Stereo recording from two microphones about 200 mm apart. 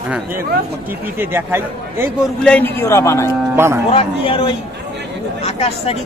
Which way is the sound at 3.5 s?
10° right (ahead or behind).